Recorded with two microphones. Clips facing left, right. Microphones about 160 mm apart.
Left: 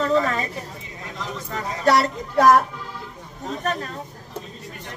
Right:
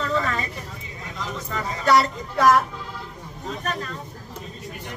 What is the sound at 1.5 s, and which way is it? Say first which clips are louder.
A woman's voice: even; 40° left (ahead or behind).